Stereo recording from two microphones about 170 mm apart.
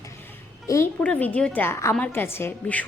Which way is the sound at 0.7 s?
15° left (ahead or behind).